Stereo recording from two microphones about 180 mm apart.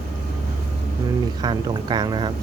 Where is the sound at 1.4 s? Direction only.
25° right (ahead or behind).